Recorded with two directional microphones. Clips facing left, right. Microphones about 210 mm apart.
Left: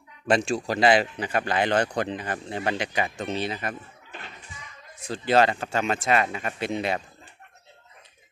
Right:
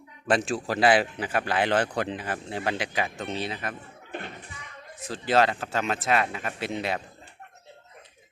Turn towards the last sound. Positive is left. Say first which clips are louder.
# left 2 dB
turn(degrees=0)  # may be behind; listen again after turning